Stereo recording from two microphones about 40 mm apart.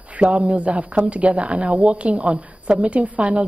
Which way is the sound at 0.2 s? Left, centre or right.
Right.